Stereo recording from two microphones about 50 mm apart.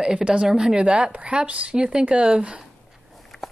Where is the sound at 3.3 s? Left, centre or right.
Centre.